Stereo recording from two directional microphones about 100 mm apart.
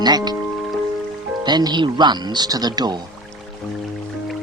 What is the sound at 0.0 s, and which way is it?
Speech, 45° right (ahead or behind).